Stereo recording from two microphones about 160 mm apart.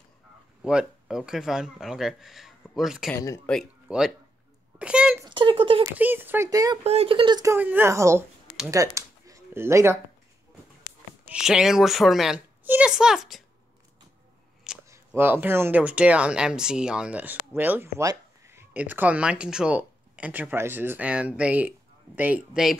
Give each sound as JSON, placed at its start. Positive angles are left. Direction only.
{"t": 0.6, "sound": "speech", "side_deg": -5}
{"t": 5.3, "sound": "speech", "side_deg": -30}
{"t": 5.9, "sound": "speech", "side_deg": -10}
{"t": 6.8, "sound": "speech", "side_deg": -40}
{"t": 7.5, "sound": "speech", "side_deg": -10}
{"t": 8.6, "sound": "a sound", "side_deg": -20}
{"t": 11.2, "sound": "speech", "side_deg": -5}
{"t": 14.9, "sound": "speech", "side_deg": -15}